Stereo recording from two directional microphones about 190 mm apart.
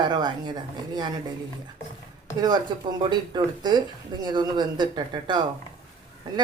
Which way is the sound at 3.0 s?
25° right (ahead or behind).